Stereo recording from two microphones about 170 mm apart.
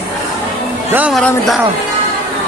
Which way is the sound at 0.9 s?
10° right (ahead or behind).